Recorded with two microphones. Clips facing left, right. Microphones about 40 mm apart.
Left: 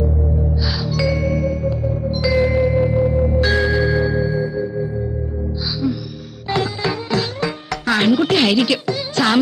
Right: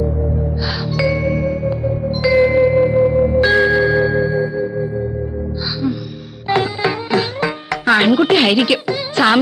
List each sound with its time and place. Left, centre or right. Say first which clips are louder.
0.9 s music: right 3 dB; right
6.5 s music: right 4 dB; right